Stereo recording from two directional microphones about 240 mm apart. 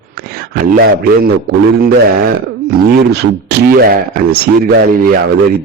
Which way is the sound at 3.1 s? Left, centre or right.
Right.